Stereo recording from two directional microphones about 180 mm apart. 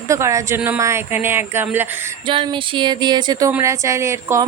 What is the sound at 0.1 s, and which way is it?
Speech, 15° right (ahead or behind).